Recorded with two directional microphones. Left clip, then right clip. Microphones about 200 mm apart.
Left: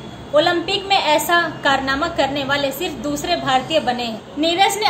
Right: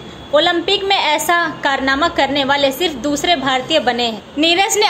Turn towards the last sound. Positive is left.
turn(degrees=-40)  # may be behind; listen again after turning